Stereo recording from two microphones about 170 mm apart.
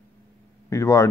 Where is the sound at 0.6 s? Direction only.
15° left (ahead or behind).